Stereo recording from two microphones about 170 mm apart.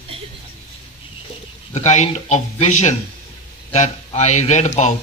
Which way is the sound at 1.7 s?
40° left (ahead or behind).